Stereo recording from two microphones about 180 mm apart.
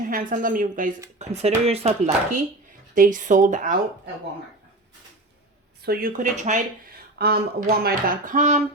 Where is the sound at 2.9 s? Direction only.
45° right (ahead or behind).